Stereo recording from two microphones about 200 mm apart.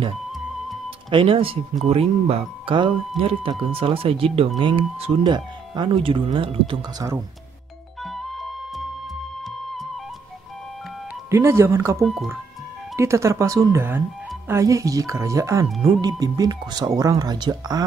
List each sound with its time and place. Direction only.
0.8 s speech: 25° right (ahead or behind)
8.0 s music: centre (ahead or behind)
11.2 s speech: 15° right (ahead or behind)
12.0 s speech: centre (ahead or behind)
12.9 s speech: 15° right (ahead or behind)